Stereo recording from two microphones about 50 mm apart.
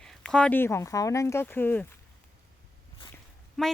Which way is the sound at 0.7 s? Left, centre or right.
Left.